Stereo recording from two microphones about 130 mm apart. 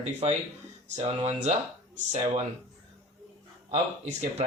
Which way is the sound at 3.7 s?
60° right (ahead or behind).